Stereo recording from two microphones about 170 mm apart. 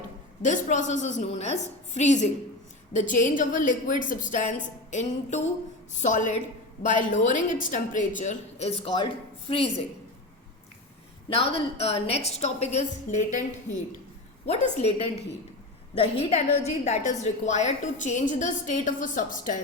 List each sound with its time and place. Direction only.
0.4 s a woman's voice: 45° left (ahead or behind); by 9.6 s 30° left (ahead or behind)
11.3 s a woman's voice: 35° left (ahead or behind)